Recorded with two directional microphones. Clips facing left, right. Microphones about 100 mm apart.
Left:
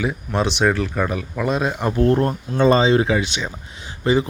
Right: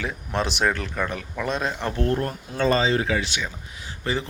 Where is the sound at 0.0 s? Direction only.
5° left (ahead or behind).